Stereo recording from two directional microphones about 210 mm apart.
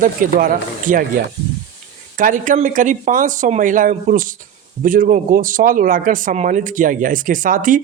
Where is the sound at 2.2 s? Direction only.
40° right (ahead or behind).